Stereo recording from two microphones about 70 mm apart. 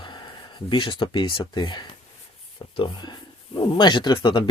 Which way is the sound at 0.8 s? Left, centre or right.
Left.